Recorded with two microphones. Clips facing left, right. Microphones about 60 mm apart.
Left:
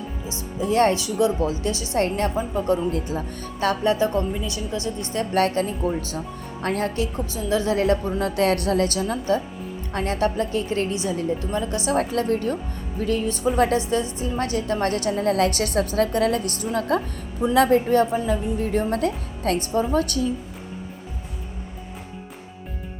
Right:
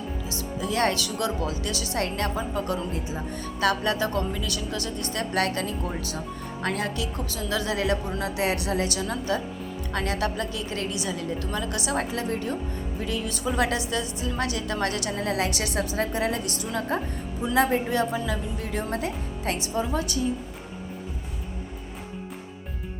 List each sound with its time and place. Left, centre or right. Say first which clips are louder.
0.3 s a woman's voice: left 6 dB; left
0.9 s speech: left 6 dB; left
2.9 s a woman's voice: left 4 dB; left
3.6 s speech: left 4 dB; left
5.3 s a woman's voice: left 6 dB; left
8.4 s a woman's voice: left 6 dB; left
11.9 s a woman's voice: left 7 dB; left
17.4 s speech: left 5 dB; left
17.9 s a woman's voice: left 6 dB; left